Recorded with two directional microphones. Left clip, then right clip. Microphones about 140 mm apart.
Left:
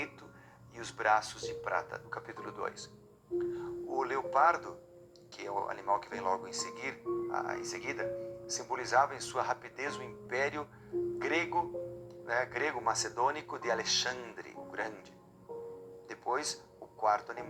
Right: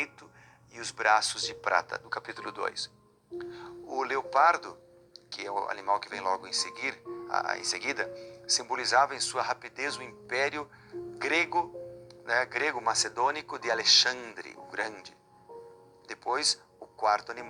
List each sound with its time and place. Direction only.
0.8 s speech: 20° right (ahead or behind)
7.3 s speech: 30° right (ahead or behind)
16.0 s music: 20° right (ahead or behind)
17.0 s speech: 20° right (ahead or behind)